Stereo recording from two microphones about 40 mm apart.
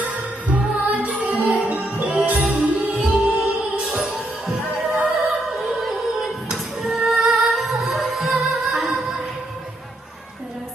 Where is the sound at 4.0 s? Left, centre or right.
Centre.